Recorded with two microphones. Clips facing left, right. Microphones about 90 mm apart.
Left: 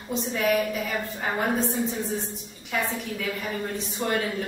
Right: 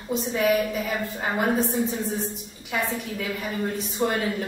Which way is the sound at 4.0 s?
10° right (ahead or behind).